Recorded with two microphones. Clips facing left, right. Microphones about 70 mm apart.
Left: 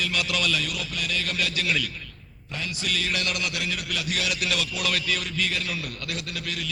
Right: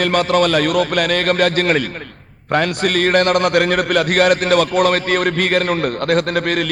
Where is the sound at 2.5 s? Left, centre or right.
Right.